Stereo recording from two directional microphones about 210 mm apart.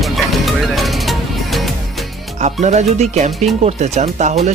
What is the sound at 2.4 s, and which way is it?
Speech, 35° right (ahead or behind).